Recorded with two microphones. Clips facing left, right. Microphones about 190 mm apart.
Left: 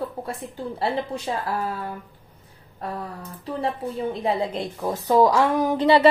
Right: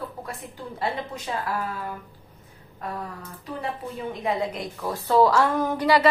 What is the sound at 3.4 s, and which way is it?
A woman's voice, 30° left (ahead or behind).